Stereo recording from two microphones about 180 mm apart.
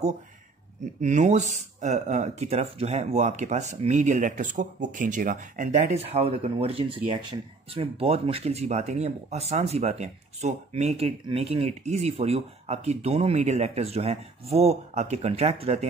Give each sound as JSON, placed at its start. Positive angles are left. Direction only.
{"t": 1.0, "sound": "speech", "side_deg": -40}